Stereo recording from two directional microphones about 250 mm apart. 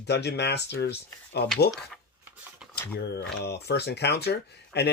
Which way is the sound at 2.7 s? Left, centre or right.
Left.